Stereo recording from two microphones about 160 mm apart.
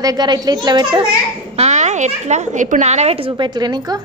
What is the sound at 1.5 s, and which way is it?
Speech, 45° right (ahead or behind).